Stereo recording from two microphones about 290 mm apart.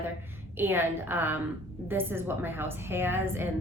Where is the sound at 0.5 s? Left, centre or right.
Centre.